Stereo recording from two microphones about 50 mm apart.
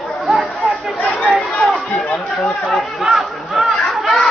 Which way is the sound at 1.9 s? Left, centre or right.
Left.